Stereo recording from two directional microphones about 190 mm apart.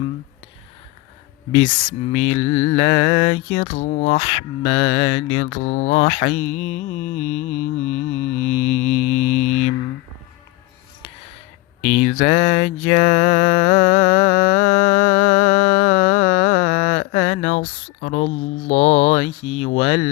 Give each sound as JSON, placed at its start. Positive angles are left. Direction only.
{"t": 2.0, "sound": "mantra", "side_deg": 35}
{"t": 11.8, "sound": "mantra", "side_deg": 35}